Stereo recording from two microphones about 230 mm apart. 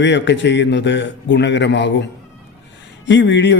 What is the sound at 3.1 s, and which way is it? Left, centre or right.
Speech, left.